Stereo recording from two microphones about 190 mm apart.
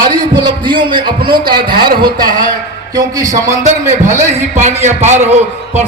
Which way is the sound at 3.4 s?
40° right (ahead or behind).